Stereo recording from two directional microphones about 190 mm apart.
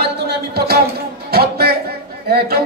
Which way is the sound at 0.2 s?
60° right (ahead or behind).